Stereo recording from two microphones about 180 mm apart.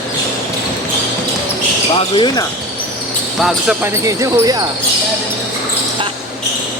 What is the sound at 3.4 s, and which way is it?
Speech, centre (ahead or behind).